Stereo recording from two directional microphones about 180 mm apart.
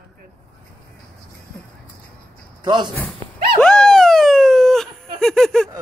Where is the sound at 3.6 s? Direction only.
5° left (ahead or behind).